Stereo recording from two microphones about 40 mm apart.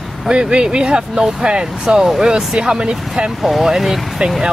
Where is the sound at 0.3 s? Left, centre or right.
Right.